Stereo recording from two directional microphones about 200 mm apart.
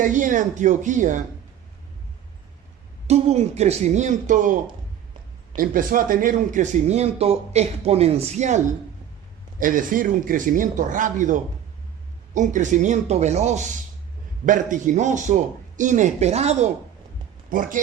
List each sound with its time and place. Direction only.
0.0 s speech: 40° right (ahead or behind)
3.1 s speech: 30° right (ahead or behind)
5.5 s speech: 45° right (ahead or behind)